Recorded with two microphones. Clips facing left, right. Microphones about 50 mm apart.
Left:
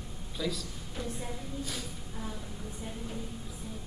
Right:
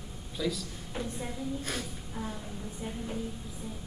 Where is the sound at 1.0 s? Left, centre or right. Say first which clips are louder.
Right 2 dB; centre.